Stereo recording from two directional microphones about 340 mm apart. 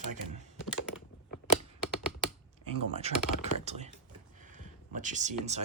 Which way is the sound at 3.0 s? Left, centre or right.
Centre.